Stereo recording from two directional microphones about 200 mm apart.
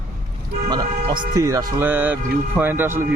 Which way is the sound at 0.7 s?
25° right (ahead or behind).